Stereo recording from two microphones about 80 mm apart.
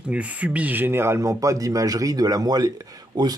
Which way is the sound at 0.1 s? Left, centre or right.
Centre.